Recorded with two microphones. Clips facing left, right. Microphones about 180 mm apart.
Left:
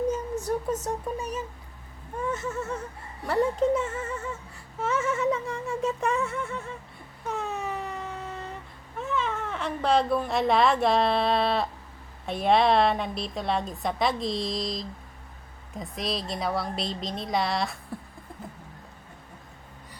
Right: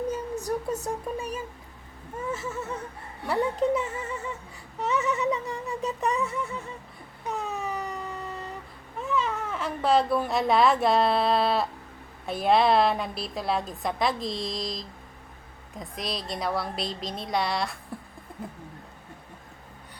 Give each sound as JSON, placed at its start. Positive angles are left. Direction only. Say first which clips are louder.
{"t": 0.3, "sound": "a sound", "louder": "left 1 dB", "side_deg": -35}
{"t": 0.8, "sound": "a woman's voice", "louder": "even", "side_deg": -10}
{"t": 7.3, "sound": "vehicle", "louder": "even", "side_deg": 0}
{"t": 9.0, "sound": "a woman's voice", "louder": "right 1 dB", "side_deg": 0}